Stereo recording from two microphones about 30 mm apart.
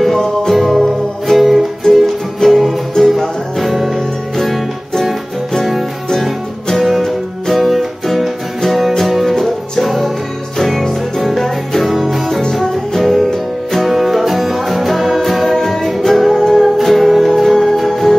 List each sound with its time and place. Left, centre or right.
0.0 s music: centre
7.5 s music: centre
11.8 s music: centre
12.3 s music: centre
13.0 s music: centre
16.2 s music: centre